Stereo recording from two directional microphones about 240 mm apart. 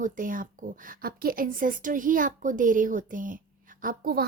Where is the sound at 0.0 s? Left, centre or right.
Right.